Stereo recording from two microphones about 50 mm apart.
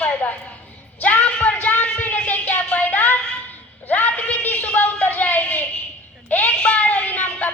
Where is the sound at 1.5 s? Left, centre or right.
Left.